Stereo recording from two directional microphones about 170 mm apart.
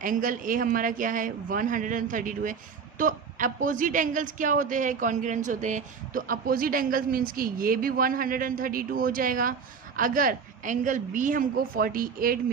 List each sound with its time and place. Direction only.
0.0 s a woman's voice: 50° right (ahead or behind)